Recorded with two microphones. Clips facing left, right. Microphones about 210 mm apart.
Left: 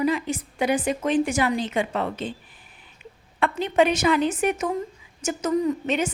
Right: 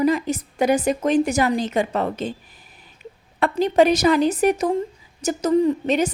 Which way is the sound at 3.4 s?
40° right (ahead or behind).